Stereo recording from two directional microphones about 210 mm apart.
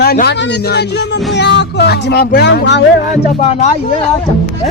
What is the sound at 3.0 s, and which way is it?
Speech, 30° left (ahead or behind).